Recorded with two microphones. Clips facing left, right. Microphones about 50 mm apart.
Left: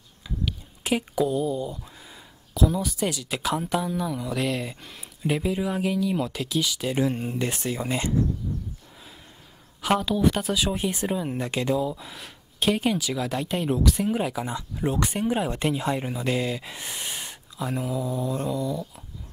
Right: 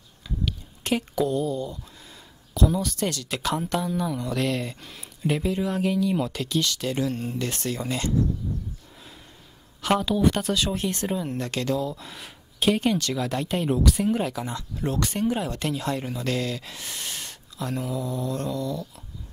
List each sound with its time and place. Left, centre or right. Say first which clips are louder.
0.5 s speech: even; centre
7.0 s speech: left 5 dB; left
9.8 s speech: even; centre